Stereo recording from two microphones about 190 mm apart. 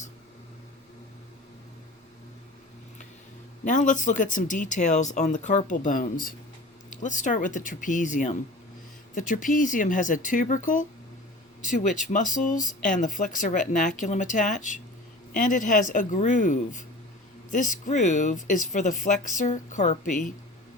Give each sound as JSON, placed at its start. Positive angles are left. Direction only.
{"t": 3.6, "sound": "speech", "side_deg": 40}